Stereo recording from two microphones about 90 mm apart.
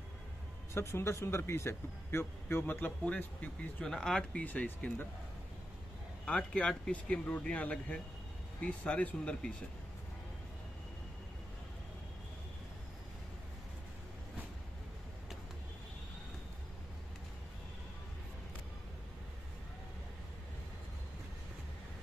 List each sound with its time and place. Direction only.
0.7 s speech: 30° left (ahead or behind)
3.8 s speech: 5° left (ahead or behind)
6.2 s speech: 10° left (ahead or behind)